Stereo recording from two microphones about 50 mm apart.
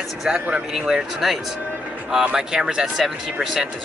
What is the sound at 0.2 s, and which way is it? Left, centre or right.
Speech, centre.